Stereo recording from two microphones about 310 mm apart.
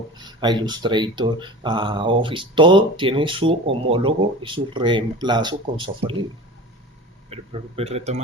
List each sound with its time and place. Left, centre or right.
0.2 s speech: centre
7.3 s speech: centre